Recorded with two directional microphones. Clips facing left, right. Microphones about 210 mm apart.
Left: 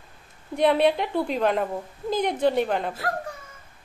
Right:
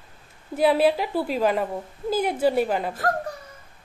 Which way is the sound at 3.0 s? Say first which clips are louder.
Right 4 dB; 45° right (ahead or behind).